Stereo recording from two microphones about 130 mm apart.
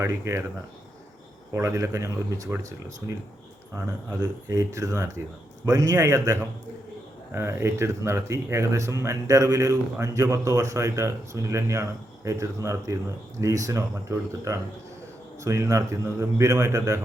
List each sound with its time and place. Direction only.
0.0 s speech: 20° right (ahead or behind)
1.5 s speech: 25° right (ahead or behind)
4.2 s speech: 25° right (ahead or behind)